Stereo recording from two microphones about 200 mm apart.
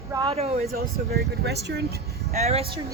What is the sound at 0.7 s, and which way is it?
Speech, 55° right (ahead or behind).